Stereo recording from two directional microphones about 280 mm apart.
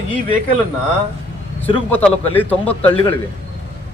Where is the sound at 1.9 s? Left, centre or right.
Centre.